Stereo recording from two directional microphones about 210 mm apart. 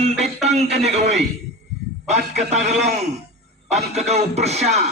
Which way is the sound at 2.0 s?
35° right (ahead or behind).